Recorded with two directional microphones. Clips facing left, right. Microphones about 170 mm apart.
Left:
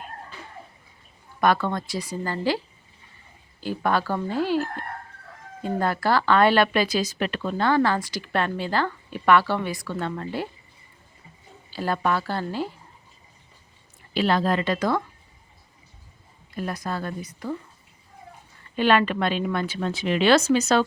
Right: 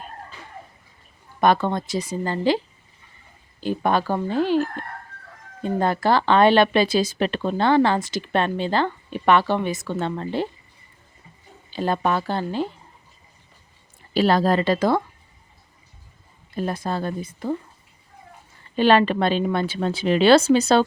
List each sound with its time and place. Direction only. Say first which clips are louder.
1.4 s speech: right 3 dB; 25° right (ahead or behind)
3.6 s speech: right 3 dB; 20° right (ahead or behind)
11.7 s speech: right 2 dB; 20° right (ahead or behind)
14.1 s a woman's voice: right 4 dB; 40° right (ahead or behind)
16.6 s speech: right 4 dB; 30° right (ahead or behind)
18.8 s a woman's voice: right 3 dB; 30° right (ahead or behind)